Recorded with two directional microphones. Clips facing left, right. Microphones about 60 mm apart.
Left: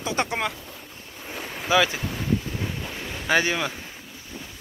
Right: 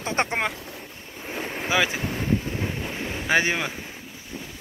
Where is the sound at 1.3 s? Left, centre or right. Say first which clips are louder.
Left 2 dB; right.